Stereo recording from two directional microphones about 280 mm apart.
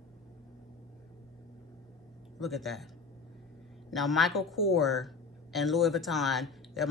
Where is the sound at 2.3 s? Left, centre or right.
Centre.